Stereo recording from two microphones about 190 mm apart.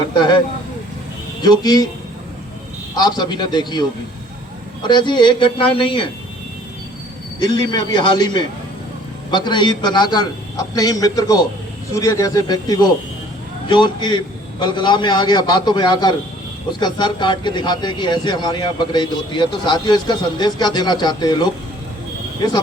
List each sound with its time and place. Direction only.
1.4 s a man's voice: 20° left (ahead or behind)
2.9 s a man's voice: 20° left (ahead or behind)
7.3 s a man's voice: 25° left (ahead or behind)